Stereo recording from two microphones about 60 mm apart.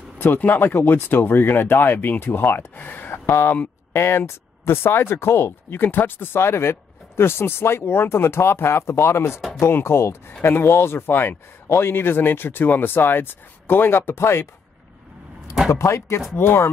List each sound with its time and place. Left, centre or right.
0.2 s speech: left
3.3 s speech: left
15.7 s speech: left
16.3 s speech: left